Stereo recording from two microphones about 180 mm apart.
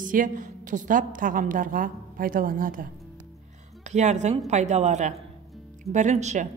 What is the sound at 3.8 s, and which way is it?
A woman's voice, 40° right (ahead or behind).